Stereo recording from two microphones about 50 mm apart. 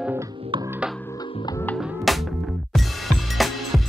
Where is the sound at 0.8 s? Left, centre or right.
Right.